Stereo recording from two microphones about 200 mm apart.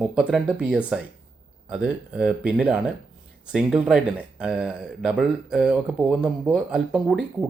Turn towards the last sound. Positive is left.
turn(degrees=0)  # may be behind; listen again after turning